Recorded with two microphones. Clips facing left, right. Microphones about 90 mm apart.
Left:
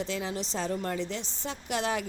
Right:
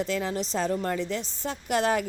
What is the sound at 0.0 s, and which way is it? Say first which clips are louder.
Speech: right 4 dB; 45° right (ahead or behind).